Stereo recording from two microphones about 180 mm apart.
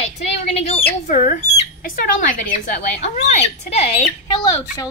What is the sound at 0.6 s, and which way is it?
Speech, 35° left (ahead or behind).